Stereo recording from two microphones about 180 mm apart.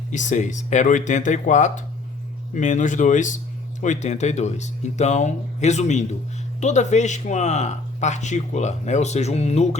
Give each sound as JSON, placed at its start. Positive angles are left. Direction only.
{"t": 0.1, "sound": "speech", "side_deg": 45}